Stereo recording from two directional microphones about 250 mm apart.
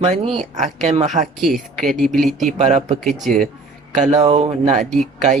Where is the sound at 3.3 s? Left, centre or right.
Centre.